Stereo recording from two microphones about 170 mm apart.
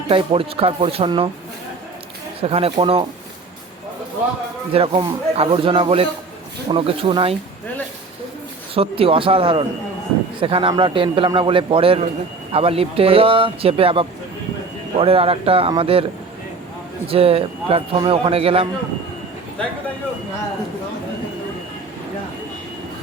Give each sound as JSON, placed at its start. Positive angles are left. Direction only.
{"t": 0.1, "sound": "a man's voice", "side_deg": -30}
{"t": 2.4, "sound": "a man's voice", "side_deg": -35}
{"t": 4.7, "sound": "a man's voice", "side_deg": -30}
{"t": 8.7, "sound": "a man's voice", "side_deg": -35}
{"t": 17.1, "sound": "a man's voice", "side_deg": -35}